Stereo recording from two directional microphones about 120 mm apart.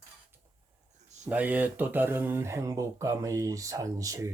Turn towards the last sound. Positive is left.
turn(degrees=-25)  # may be behind; listen again after turning